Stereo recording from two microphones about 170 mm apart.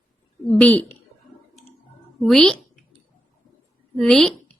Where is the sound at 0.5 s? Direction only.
10° left (ahead or behind).